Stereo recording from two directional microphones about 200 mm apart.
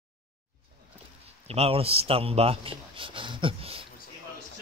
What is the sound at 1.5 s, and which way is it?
Speech, 30° right (ahead or behind).